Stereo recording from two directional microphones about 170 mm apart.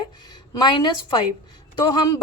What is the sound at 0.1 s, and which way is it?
A woman's voice, 25° left (ahead or behind).